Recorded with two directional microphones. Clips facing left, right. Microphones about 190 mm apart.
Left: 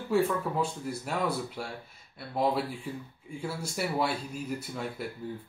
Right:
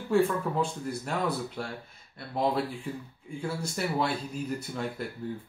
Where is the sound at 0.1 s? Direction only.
5° left (ahead or behind).